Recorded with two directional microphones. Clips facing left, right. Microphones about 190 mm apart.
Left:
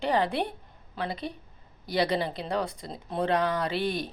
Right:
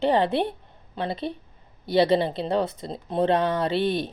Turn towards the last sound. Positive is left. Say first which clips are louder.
# right 5 dB
turn(degrees=-25)  # may be behind; listen again after turning